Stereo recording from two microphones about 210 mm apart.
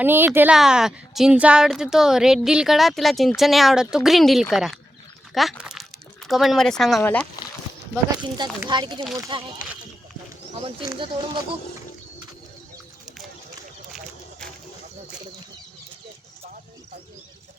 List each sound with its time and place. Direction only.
0.0 s speech: 10° right (ahead or behind); by 7.3 s 5° left (ahead or behind)
8.4 s speech: 20° right (ahead or behind)
10.6 s speech: 25° right (ahead or behind)
13.9 s a sound: 5° left (ahead or behind)